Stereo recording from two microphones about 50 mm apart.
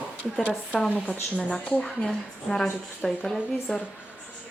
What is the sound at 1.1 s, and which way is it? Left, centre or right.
A woman's voice, left.